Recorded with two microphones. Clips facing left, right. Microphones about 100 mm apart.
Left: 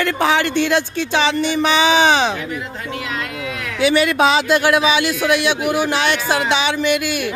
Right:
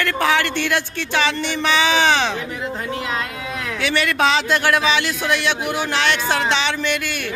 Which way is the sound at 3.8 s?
15° left (ahead or behind).